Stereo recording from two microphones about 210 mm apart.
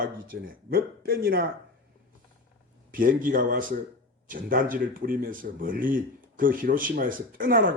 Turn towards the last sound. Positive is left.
turn(degrees=-40)  # may be behind; listen again after turning